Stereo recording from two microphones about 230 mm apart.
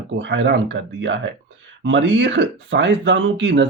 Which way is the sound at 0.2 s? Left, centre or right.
Right.